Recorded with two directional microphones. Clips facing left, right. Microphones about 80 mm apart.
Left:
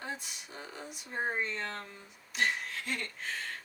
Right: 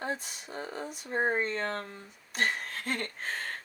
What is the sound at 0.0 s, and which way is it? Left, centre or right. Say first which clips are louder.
Speech: right 6 dB; right.